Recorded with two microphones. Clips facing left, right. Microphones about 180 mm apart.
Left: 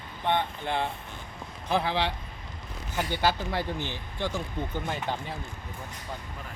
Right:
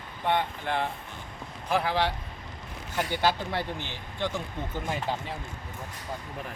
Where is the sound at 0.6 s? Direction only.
20° left (ahead or behind).